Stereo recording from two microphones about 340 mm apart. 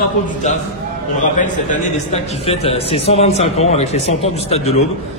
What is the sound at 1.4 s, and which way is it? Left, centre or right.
A man's voice, left.